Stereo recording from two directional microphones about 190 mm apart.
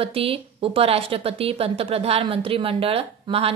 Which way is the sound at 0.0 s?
30° right (ahead or behind).